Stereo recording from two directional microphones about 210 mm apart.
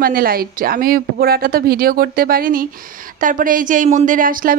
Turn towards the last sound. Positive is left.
turn(degrees=-40)  # may be behind; listen again after turning